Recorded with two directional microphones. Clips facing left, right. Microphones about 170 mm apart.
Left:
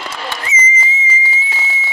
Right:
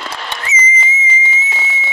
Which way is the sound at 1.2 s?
25° right (ahead or behind).